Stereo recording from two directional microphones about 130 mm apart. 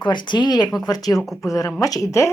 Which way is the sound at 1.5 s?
25° left (ahead or behind).